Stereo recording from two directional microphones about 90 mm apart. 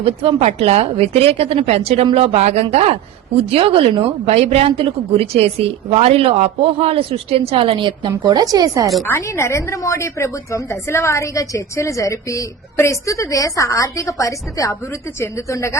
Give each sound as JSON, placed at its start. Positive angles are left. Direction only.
{"t": 0.0, "sound": "a woman's voice", "side_deg": -90}
{"t": 9.0, "sound": "a woman's voice", "side_deg": 30}